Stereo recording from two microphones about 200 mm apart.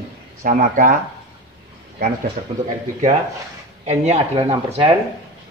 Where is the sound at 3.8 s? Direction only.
35° right (ahead or behind).